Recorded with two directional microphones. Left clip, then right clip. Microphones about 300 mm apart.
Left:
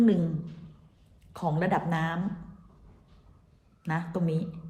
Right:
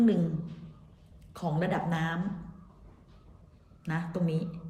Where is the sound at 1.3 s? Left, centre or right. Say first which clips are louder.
Left 4 dB; centre.